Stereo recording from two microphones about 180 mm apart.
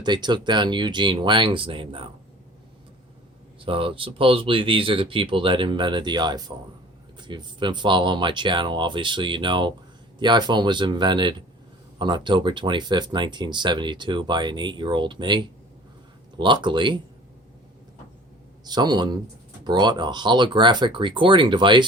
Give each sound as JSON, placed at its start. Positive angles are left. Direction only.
{"t": 0.0, "sound": "speech", "side_deg": -25}
{"t": 3.6, "sound": "speech", "side_deg": -30}
{"t": 18.6, "sound": "speech", "side_deg": -25}